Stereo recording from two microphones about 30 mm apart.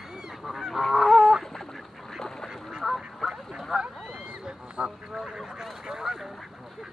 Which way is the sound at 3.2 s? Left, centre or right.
Centre.